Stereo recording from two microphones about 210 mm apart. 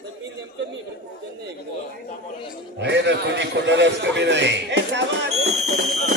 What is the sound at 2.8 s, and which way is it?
A man's voice, 55° right (ahead or behind).